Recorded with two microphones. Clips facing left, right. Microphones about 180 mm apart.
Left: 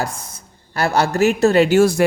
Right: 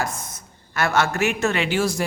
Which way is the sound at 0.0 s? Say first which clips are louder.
Left 2 dB; 35° left (ahead or behind).